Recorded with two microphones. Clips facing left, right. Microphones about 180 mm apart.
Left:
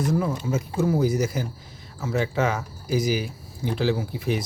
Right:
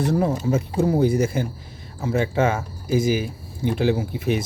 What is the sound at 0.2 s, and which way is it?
Speech, 40° right (ahead or behind).